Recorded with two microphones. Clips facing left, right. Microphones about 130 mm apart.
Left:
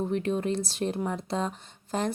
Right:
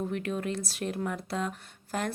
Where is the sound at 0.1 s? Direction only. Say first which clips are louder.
Left 4 dB; 30° left (ahead or behind).